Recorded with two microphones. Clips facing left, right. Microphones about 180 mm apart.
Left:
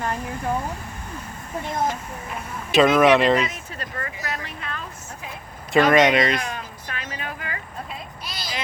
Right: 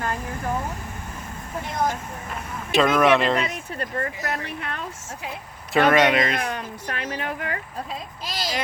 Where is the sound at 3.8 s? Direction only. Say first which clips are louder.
Right 6 dB; 55° right (ahead or behind).